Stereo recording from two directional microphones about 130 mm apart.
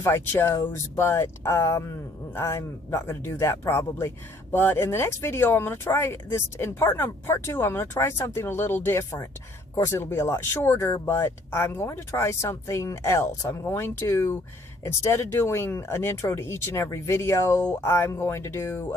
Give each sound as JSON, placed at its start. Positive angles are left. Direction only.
{"t": 0.0, "sound": "speech", "side_deg": 20}